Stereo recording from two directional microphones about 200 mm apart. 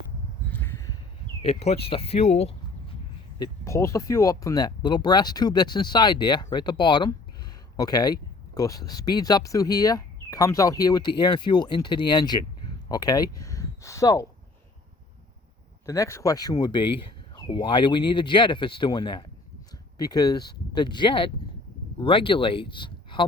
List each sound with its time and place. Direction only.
0.5 s a sound: 10° left (ahead or behind)
1.4 s speech: 30° left (ahead or behind)
3.3 s speech: 15° left (ahead or behind)
15.9 s speech: 15° left (ahead or behind)